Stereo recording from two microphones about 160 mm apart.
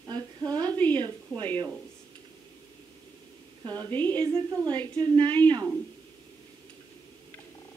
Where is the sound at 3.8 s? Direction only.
10° left (ahead or behind).